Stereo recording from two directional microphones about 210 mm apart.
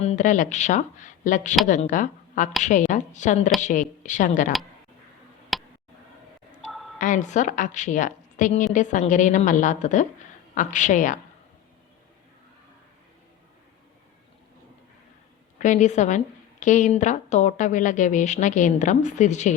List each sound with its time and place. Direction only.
0.0 s a woman's voice: 35° left (ahead or behind)
5.5 s tick: centre (ahead or behind)
7.0 s a woman's voice: 35° left (ahead or behind)
15.5 s a woman's voice: 35° left (ahead or behind)